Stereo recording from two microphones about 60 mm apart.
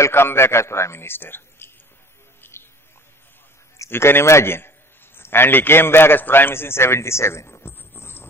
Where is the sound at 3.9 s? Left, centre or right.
Left.